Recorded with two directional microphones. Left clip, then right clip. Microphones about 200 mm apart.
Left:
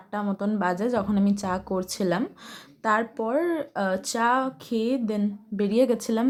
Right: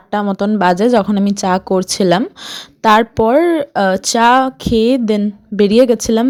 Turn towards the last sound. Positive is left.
turn(degrees=-35)  # may be behind; listen again after turning